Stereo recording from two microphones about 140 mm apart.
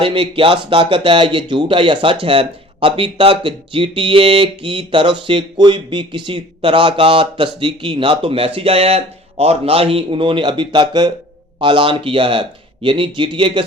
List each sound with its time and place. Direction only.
0.0 s speech: 40° right (ahead or behind)